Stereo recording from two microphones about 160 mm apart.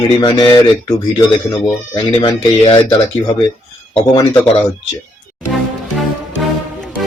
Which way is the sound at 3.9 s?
30° left (ahead or behind).